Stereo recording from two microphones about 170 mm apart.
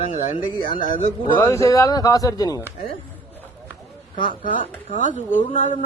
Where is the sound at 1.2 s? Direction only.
20° left (ahead or behind).